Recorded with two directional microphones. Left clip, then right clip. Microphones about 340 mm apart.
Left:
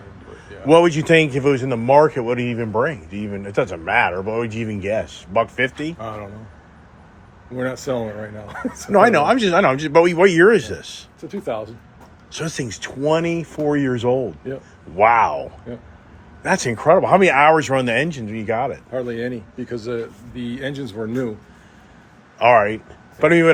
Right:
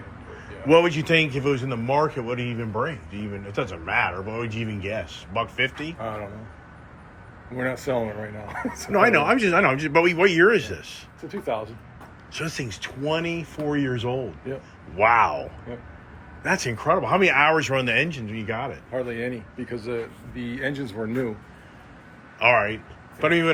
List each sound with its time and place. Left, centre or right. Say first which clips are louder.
0.7 s a man's voice: left 5 dB; centre
5.8 s speech: left 3 dB; left
7.5 s speech: left 2 dB; left
8.9 s speech: left 5 dB; centre
11.2 s speech: left 2 dB; left
13.6 s a man's voice: left 6 dB; centre
16.6 s speech: left 10 dB; centre
18.9 s speech: left 1 dB; left
22.4 s a man's voice: left 6 dB; centre